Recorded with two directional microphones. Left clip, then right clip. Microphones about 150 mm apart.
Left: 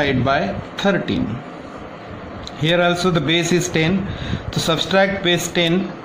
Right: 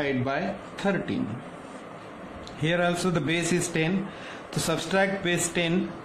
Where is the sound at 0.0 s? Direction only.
20° left (ahead or behind).